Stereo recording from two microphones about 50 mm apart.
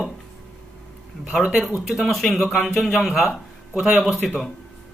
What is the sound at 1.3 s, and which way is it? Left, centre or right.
Speech, centre.